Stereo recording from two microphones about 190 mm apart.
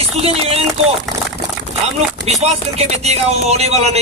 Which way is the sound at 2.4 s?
35° right (ahead or behind).